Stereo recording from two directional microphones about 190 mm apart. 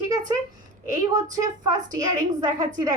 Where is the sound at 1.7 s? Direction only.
20° right (ahead or behind).